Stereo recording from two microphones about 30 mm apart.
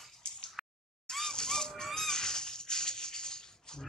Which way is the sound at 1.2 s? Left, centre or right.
Left.